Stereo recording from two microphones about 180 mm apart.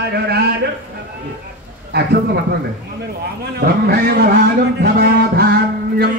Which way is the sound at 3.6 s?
60° right (ahead or behind).